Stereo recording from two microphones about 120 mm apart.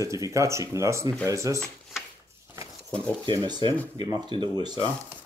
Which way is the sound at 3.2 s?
40° right (ahead or behind).